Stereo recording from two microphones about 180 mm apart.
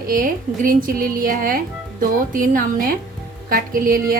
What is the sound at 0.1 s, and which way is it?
A woman's voice, 50° right (ahead or behind).